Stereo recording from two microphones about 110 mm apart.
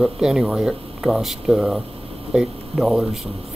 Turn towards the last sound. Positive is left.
turn(degrees=-5)  # may be behind; listen again after turning